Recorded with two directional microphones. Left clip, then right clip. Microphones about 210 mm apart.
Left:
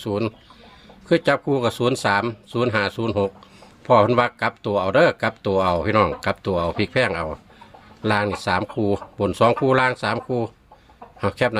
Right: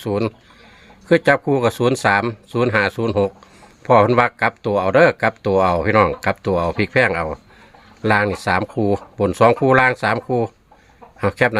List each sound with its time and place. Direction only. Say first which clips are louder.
0.0 s speech: right 3 dB; 35° right (ahead or behind)